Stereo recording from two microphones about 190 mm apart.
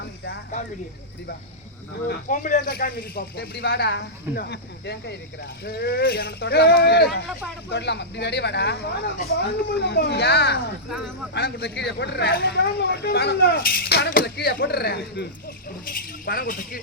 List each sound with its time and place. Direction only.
2.0 s speech: 45° left (ahead or behind)